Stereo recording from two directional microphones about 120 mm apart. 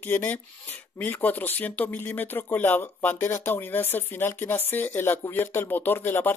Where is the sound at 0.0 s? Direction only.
15° left (ahead or behind).